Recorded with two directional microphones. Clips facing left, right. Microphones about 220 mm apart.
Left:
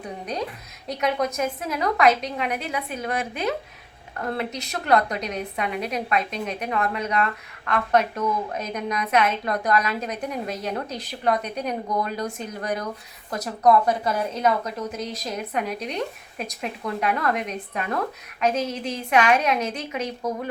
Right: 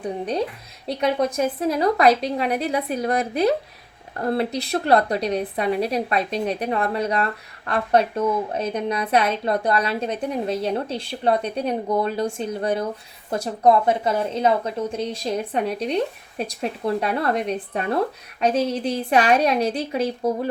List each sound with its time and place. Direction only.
0.0 s a woman's voice: 30° right (ahead or behind)